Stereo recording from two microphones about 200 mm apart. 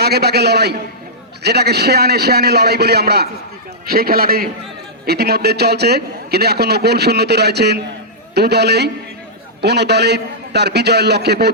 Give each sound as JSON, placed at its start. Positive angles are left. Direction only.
{"t": 0.0, "sound": "a man's voice", "side_deg": -55}